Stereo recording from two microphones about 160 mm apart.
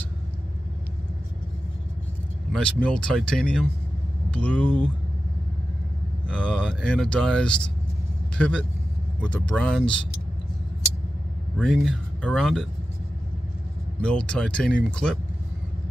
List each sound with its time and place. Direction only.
2.5 s speech: 5° left (ahead or behind)
6.2 s speech: 5° left (ahead or behind)
11.5 s speech: 5° left (ahead or behind)
14.0 s speech: 5° left (ahead or behind)